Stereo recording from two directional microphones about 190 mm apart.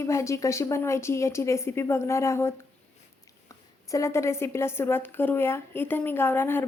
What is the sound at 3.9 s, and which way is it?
A woman's voice, 15° left (ahead or behind).